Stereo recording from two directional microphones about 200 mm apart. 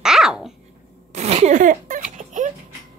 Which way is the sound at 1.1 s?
35° right (ahead or behind).